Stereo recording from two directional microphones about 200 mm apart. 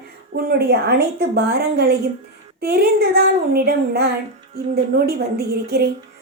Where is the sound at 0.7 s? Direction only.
50° right (ahead or behind).